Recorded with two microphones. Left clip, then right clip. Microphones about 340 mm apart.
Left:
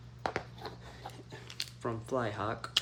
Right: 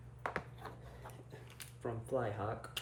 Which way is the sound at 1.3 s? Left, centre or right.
Centre.